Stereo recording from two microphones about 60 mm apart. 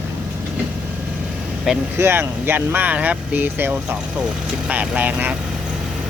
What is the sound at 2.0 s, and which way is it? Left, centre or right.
Speech, right.